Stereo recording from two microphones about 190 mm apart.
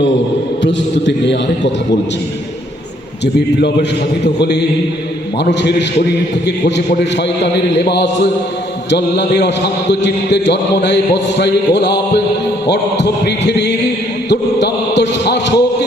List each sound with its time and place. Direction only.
0.6 s a man's voice: 70° left (ahead or behind)
4.2 s speech: 60° left (ahead or behind)
6.4 s speech: 65° left (ahead or behind)
14.3 s a sound: 65° left (ahead or behind)